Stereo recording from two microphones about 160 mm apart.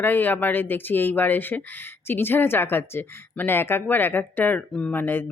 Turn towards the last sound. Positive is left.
turn(degrees=15)  # may be behind; listen again after turning